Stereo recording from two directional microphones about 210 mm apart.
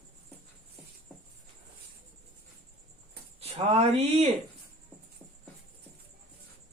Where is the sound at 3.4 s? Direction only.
30° right (ahead or behind).